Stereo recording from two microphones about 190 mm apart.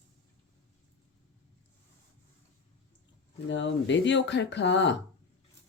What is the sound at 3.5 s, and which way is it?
Speech, 70° left (ahead or behind).